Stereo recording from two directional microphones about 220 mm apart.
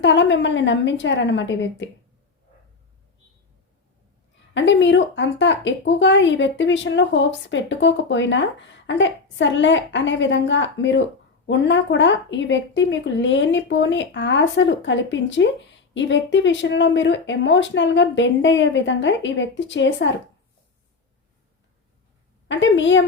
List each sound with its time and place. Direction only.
0.0 s speech: 55° left (ahead or behind)
4.5 s speech: 55° left (ahead or behind)
22.4 s speech: 55° left (ahead or behind)